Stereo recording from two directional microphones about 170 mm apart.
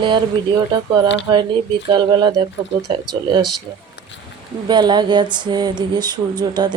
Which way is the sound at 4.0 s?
90° left.